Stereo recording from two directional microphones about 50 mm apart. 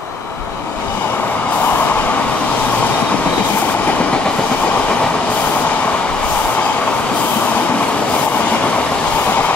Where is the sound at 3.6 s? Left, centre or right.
Left.